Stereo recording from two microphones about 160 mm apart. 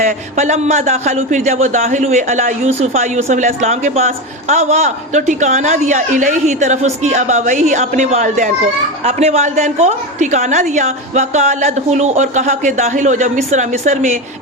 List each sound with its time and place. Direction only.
0.0 s a man's voice: 45° right (ahead or behind)